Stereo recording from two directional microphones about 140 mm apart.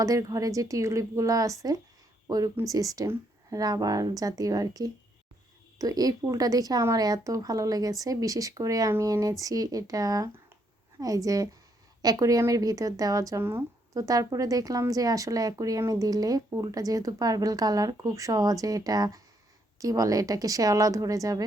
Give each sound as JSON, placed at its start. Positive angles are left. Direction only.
{"t": 0.0, "sound": "a woman's voice", "side_deg": -25}